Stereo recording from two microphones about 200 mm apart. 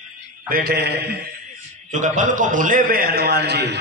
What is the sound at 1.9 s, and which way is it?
A man's voice, 40° right (ahead or behind).